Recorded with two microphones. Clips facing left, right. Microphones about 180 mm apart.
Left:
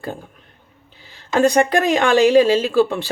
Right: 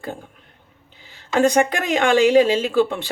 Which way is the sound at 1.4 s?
15° right (ahead or behind).